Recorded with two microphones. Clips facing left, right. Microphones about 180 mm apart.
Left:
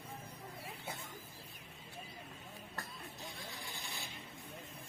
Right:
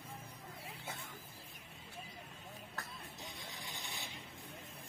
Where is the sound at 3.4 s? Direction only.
20° right (ahead or behind).